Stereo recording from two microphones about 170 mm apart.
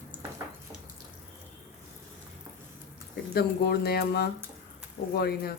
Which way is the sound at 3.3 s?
70° left (ahead or behind).